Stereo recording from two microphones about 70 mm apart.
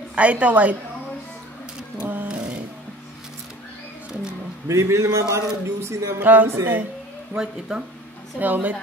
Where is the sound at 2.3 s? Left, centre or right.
Centre.